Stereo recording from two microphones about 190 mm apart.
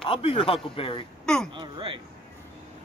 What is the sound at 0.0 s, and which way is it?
A man's voice, 30° left (ahead or behind).